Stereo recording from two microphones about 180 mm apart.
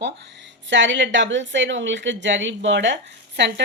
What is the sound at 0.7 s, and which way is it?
A woman's voice, 90° right.